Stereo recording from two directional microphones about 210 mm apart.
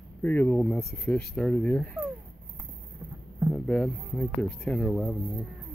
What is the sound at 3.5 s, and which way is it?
Speech, 5° left (ahead or behind).